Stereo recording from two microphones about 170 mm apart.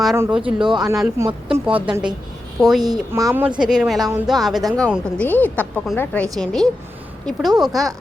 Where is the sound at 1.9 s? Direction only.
5° right (ahead or behind).